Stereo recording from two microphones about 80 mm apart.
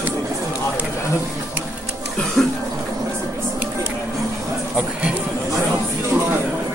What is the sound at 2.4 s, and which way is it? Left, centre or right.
Cough, centre.